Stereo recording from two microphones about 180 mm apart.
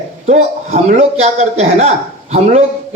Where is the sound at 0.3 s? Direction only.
40° right (ahead or behind).